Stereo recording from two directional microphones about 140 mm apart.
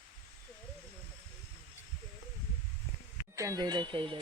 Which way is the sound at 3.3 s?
25° right (ahead or behind).